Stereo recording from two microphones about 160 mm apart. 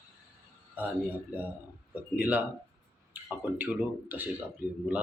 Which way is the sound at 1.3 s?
10° right (ahead or behind).